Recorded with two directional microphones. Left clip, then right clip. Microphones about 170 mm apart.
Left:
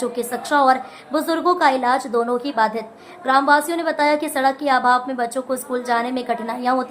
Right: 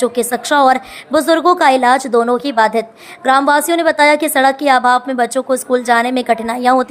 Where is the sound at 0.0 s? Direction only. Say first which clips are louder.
Right 8 dB; 50° right (ahead or behind).